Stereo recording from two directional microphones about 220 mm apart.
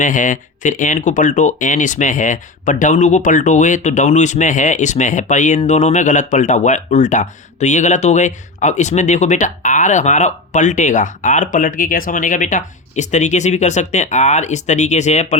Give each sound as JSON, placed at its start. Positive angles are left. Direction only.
{"t": 0.0, "sound": "speech", "side_deg": 35}